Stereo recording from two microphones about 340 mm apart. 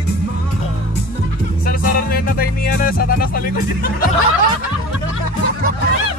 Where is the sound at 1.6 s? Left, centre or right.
Left.